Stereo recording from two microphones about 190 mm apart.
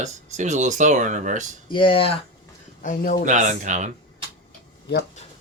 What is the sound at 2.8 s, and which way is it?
Speech, 45° left (ahead or behind).